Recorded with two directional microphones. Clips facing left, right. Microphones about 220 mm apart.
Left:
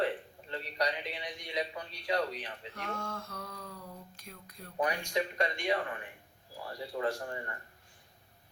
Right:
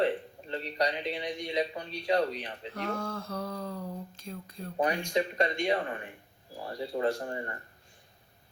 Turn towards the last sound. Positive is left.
turn(degrees=-30)  # may be behind; listen again after turning